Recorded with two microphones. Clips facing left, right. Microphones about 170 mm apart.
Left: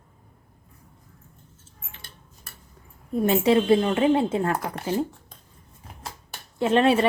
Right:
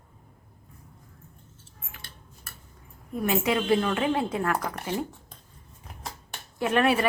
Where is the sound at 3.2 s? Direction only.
30° left (ahead or behind).